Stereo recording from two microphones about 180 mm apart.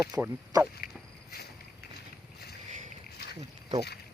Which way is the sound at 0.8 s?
55° left (ahead or behind).